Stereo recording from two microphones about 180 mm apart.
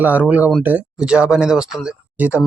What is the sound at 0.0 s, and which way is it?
Speech, 10° right (ahead or behind).